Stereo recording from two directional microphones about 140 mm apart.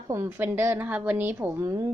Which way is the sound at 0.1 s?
15° right (ahead or behind).